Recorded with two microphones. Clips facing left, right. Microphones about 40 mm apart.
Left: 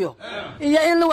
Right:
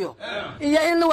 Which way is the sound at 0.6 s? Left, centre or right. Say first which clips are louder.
Left 3 dB; left.